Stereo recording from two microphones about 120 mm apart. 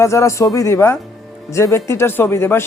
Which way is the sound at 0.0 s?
25° left (ahead or behind).